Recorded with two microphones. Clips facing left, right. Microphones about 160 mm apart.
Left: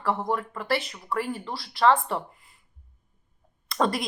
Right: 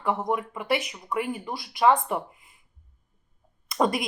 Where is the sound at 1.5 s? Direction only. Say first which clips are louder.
Even; 15° right (ahead or behind).